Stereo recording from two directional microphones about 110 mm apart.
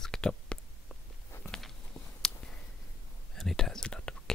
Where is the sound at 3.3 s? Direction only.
5° left (ahead or behind).